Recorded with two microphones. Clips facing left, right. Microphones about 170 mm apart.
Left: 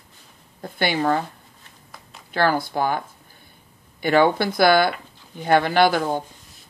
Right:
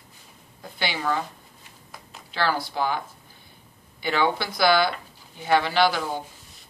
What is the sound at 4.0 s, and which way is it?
Speech, 50° left (ahead or behind).